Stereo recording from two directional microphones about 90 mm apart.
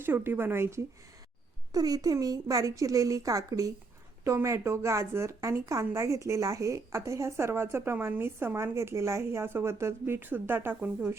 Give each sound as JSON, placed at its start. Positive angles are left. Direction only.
{"t": 0.0, "sound": "a woman's voice", "side_deg": -25}
{"t": 1.7, "sound": "speech", "side_deg": -45}
{"t": 7.9, "sound": "a woman's voice", "side_deg": -15}
{"t": 8.2, "sound": "a woman's voice", "side_deg": -25}